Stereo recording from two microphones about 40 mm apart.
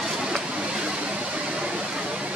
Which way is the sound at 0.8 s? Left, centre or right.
Right.